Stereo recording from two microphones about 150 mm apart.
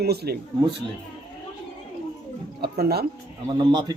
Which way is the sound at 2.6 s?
90° right.